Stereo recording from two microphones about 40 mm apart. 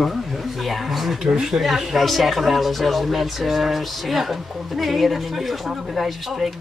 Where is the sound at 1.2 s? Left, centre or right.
Centre.